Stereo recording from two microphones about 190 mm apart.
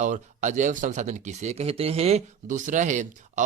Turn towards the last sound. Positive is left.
turn(degrees=-40)  # may be behind; listen again after turning